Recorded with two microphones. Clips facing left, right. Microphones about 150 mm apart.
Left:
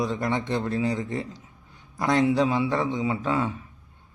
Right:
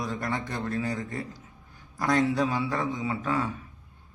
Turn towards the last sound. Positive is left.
turn(degrees=25)  # may be behind; listen again after turning